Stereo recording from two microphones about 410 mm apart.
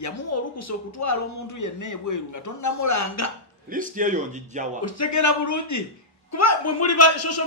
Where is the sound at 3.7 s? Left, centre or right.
Centre.